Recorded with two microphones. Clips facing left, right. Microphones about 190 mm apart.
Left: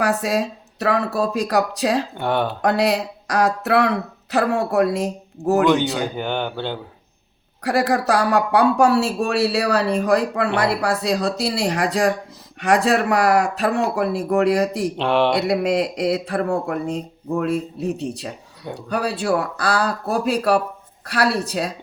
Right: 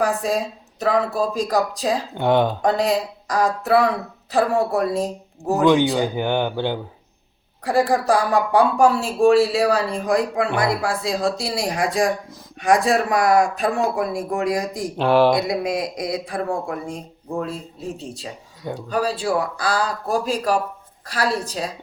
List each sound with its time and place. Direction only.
0.0 s speech: 70° left (ahead or behind)
2.1 s speech: 15° right (ahead or behind)
2.6 s speech: 70° left (ahead or behind)
6.0 s speech: 15° right (ahead or behind)
7.6 s speech: 70° left (ahead or behind)
14.9 s speech: 5° right (ahead or behind)
15.4 s speech: 65° left (ahead or behind)